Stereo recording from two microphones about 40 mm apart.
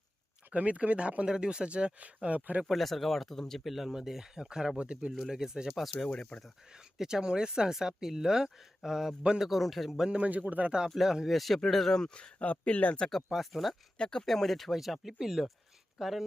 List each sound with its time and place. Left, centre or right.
0.5 s speech: right
2.6 s speech: centre
5.7 s speech: centre
6.1 s speech: centre
7.0 s speech: centre
10.2 s speech: right
10.8 s speech: centre
11.3 s speech: centre
12.1 s speech: left
13.3 s speech: centre
14.0 s speech: centre
14.3 s speech: centre